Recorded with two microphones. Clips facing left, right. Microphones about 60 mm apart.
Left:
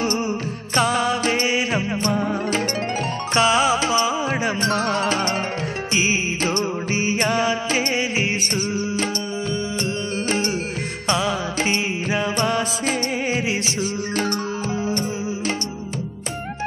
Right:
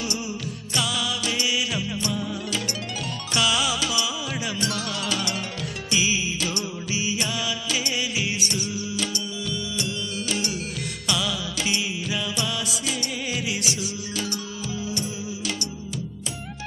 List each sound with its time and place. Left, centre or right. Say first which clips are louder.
0.7 s music: left 8 dB; left
11.1 s music: left 6 dB; left
14.9 s music: left 6 dB; left